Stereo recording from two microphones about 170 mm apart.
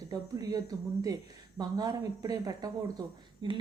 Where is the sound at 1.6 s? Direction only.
20° right (ahead or behind).